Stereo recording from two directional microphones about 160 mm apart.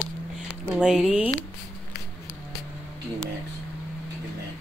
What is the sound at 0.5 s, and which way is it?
Speech, 5° right (ahead or behind).